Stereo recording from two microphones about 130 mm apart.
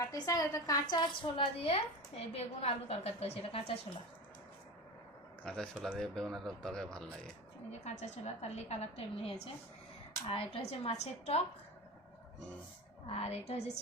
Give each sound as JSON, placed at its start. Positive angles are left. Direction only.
{"t": 0.0, "sound": "a woman's voice", "side_deg": 25}
{"t": 5.4, "sound": "speech", "side_deg": 5}
{"t": 7.7, "sound": "a woman's voice", "side_deg": 60}
{"t": 10.5, "sound": "a woman's voice", "side_deg": 50}
{"t": 13.1, "sound": "a woman's voice", "side_deg": 55}